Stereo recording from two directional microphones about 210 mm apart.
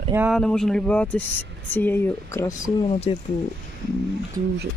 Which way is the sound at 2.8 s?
25° left (ahead or behind).